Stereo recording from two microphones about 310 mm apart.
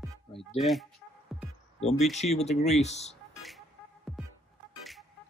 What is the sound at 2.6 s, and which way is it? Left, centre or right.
Speech, left.